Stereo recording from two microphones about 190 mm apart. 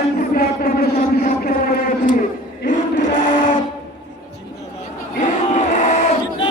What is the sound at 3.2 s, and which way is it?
Sewing machine, 40° left (ahead or behind).